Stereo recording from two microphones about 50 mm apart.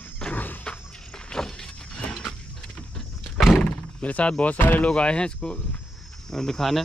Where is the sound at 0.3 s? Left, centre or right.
Left.